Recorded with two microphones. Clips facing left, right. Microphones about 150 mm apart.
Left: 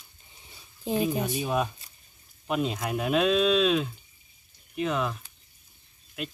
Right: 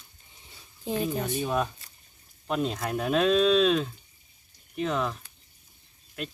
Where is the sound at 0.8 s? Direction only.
10° left (ahead or behind).